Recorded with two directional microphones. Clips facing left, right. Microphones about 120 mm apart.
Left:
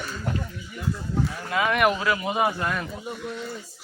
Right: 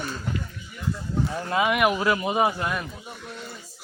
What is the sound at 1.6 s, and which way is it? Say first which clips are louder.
Speech: left 1 dB; 5° right (ahead or behind).